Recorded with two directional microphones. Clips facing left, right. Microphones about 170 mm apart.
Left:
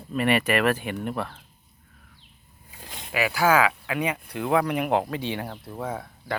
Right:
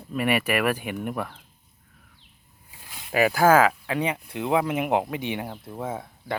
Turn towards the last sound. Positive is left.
turn(degrees=-25)  # may be behind; listen again after turning